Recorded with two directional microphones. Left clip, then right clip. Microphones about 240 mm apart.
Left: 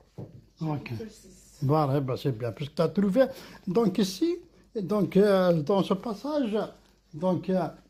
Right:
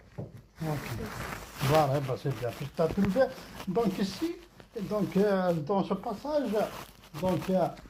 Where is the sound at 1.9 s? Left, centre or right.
Left.